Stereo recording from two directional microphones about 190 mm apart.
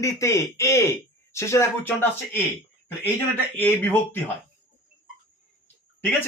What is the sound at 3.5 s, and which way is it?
Speech, 10° left (ahead or behind).